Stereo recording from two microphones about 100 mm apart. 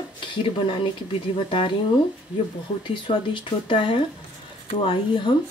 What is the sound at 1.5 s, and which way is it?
Speech, 60° left (ahead or behind).